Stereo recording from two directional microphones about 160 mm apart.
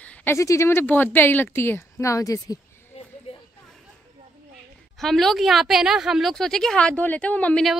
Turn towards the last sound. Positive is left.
turn(degrees=5)  # may be behind; listen again after turning